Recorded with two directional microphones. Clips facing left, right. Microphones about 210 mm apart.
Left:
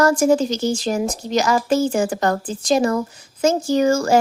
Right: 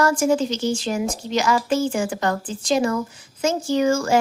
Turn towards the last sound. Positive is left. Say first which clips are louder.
# left 3 dB
turn(degrees=40)  # may be behind; listen again after turning